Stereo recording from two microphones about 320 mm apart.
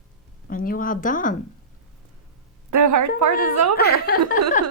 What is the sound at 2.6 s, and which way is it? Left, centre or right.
Speech, right.